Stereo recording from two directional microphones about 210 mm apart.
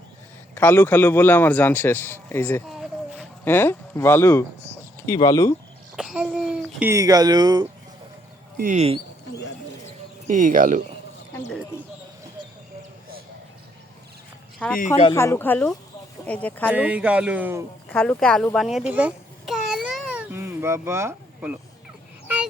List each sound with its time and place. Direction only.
0.5 s a man's voice: 10° left (ahead or behind)
2.6 s a sound: centre (ahead or behind)
5.0 s a man's voice: 15° left (ahead or behind)
6.0 s speech: 5° right (ahead or behind)
8.5 s speech: 35° right (ahead or behind)
10.2 s speech: 40° right (ahead or behind)
14.8 s speech: 30° left (ahead or behind)
15.1 s a man's voice: 10° left (ahead or behind)
16.7 s speech: 5° right (ahead or behind)
17.8 s babbling: 5° left (ahead or behind); by 21.6 s 10° right (ahead or behind)